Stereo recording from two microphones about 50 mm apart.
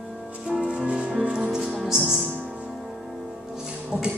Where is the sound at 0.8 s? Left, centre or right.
Right.